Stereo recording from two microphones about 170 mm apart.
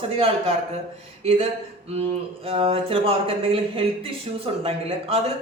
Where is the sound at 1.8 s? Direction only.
35° right (ahead or behind).